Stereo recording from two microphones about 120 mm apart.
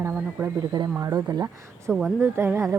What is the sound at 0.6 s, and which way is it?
Speech, 35° right (ahead or behind).